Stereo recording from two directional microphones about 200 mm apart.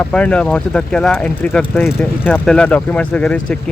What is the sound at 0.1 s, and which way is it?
Speech, 5° left (ahead or behind).